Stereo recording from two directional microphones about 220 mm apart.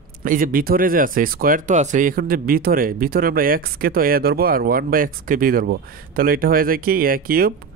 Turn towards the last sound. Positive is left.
turn(degrees=-45)  # may be behind; listen again after turning